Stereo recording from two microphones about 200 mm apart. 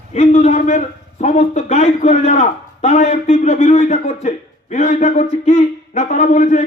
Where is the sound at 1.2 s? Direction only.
35° left (ahead or behind).